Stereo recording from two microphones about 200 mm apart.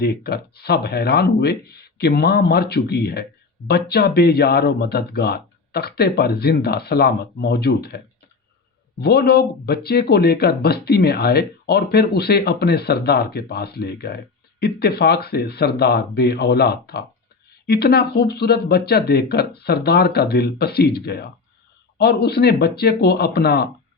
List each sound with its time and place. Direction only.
0.0 s speech: 50° left (ahead or behind)